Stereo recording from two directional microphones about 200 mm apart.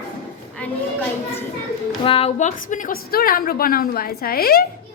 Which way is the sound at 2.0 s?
30° left (ahead or behind).